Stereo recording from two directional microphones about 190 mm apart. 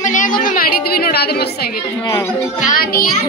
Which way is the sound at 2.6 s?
50° left (ahead or behind).